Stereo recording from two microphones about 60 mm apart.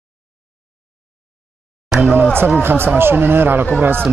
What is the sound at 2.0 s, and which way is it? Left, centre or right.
A man's voice, right.